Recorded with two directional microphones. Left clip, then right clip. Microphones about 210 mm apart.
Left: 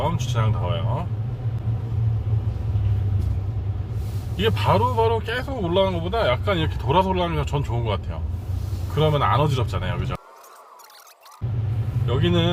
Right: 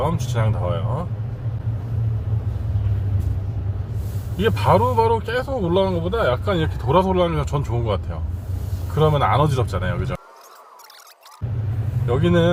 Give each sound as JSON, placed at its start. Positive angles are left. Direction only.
{"t": 0.0, "sound": "speech", "side_deg": -20}
{"t": 4.4, "sound": "speech", "side_deg": -20}
{"t": 9.0, "sound": "speech", "side_deg": -20}
{"t": 12.0, "sound": "speech", "side_deg": -20}